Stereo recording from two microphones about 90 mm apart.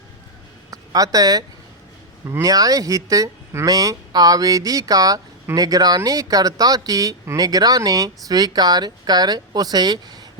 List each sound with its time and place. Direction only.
0.7 s speech: 40° right (ahead or behind)
3.7 s speech: 45° right (ahead or behind)